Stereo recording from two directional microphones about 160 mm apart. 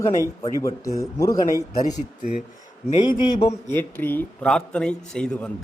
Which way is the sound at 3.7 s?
10° left (ahead or behind).